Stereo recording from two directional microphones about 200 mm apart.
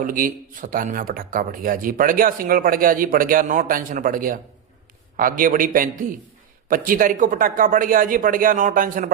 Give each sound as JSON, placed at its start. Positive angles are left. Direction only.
{"t": 0.0, "sound": "speech", "side_deg": -45}